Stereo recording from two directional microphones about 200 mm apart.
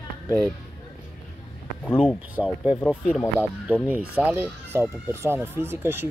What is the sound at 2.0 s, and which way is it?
Speech, 5° right (ahead or behind).